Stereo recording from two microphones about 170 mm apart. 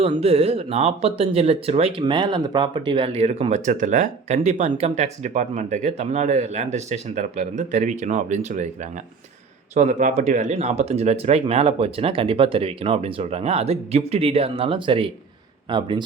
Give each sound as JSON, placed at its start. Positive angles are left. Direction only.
{"t": 0.0, "sound": "speech", "side_deg": -35}